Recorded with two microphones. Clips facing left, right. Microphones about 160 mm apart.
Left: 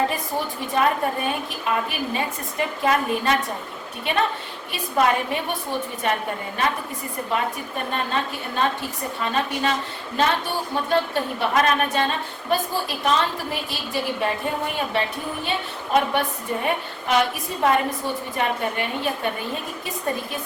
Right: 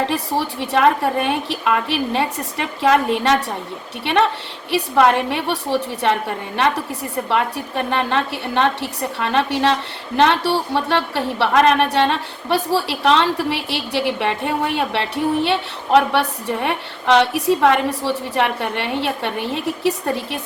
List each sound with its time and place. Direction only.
0.1 s speech: 75° right (ahead or behind)
4.0 s a woman's voice: 80° right
7.3 s speech: 75° right (ahead or behind)